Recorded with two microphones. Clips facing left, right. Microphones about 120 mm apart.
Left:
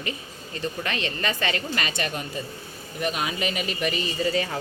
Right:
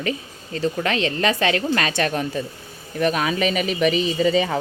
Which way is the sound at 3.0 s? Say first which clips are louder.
Right 7 dB; 75° right (ahead or behind).